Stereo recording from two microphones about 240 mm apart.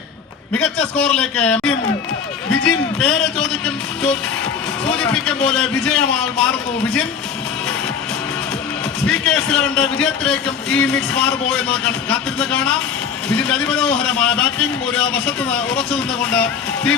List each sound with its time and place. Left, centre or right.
0.5 s a man's voice: centre
4.9 s a man's voice: centre
9.0 s a man's voice: centre